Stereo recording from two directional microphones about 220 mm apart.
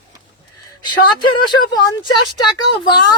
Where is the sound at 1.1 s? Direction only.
20° left (ahead or behind).